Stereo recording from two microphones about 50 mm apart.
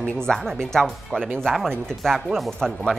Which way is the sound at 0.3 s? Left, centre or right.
Centre.